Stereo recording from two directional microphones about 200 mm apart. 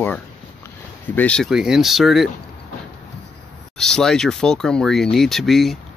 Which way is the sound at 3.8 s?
5° left (ahead or behind).